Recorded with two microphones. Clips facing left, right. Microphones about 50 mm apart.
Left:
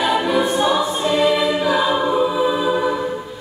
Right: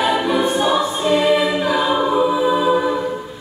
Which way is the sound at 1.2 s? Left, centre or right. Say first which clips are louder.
Right 1 dB; centre.